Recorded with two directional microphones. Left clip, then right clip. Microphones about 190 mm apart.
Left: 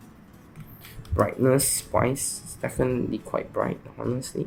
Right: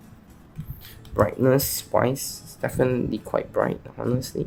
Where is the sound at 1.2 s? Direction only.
10° right (ahead or behind).